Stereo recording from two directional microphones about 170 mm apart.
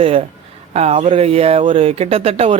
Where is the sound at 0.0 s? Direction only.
35° right (ahead or behind).